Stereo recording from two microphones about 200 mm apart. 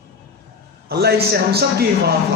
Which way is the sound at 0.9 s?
55° right (ahead or behind).